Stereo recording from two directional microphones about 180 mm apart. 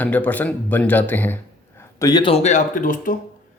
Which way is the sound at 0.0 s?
10° left (ahead or behind).